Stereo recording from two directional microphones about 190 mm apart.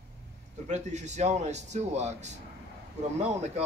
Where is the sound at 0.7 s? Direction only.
40° right (ahead or behind).